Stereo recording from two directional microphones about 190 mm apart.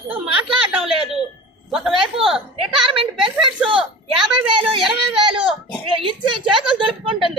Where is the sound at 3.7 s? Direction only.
5° right (ahead or behind).